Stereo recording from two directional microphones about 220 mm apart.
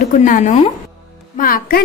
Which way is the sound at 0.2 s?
35° left (ahead or behind).